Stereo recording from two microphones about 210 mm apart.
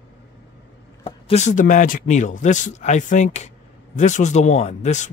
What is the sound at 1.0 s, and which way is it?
Speech, 30° left (ahead or behind).